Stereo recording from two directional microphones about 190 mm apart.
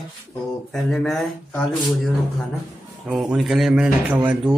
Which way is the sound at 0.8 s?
Centre (ahead or behind).